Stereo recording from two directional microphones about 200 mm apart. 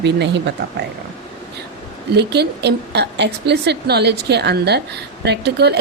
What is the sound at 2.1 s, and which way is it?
A woman's voice, 55° right (ahead or behind).